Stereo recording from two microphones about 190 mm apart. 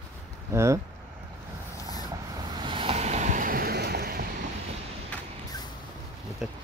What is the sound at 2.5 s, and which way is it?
Vehicle, 25° right (ahead or behind).